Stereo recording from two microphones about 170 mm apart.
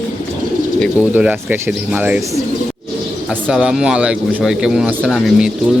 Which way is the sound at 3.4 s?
5° right (ahead or behind).